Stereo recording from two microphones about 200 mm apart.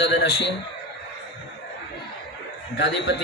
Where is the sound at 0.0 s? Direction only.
60° left (ahead or behind).